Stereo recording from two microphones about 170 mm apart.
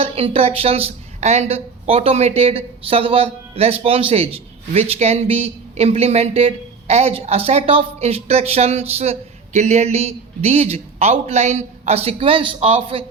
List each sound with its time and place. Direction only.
0.0 s a woman's voice: 35° right (ahead or behind)